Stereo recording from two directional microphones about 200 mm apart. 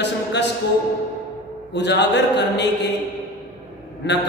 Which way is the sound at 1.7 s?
60° left (ahead or behind).